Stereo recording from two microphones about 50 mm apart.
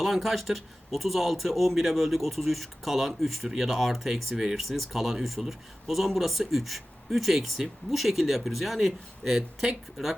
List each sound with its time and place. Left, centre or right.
0.0 s speech: centre